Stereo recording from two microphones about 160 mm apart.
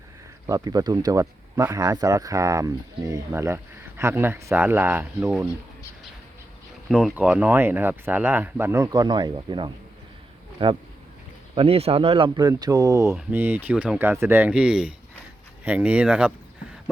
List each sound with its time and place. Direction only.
0.4 s speech: 25° right (ahead or behind)
6.9 s speech: 10° right (ahead or behind)